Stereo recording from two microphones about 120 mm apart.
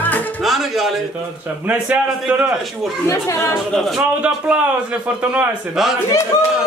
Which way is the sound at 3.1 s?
25° left (ahead or behind).